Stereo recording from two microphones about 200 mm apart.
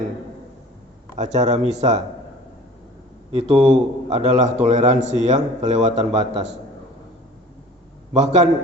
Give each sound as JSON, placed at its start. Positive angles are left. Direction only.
{"t": 1.1, "sound": "a man's voice", "side_deg": -35}
{"t": 3.3, "sound": "a man's voice", "side_deg": -30}
{"t": 8.1, "sound": "a man's voice", "side_deg": -35}